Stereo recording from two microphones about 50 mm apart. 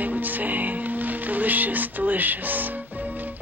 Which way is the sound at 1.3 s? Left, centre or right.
Right.